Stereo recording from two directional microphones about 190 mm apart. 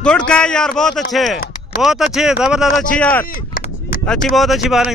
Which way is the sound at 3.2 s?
50° left (ahead or behind).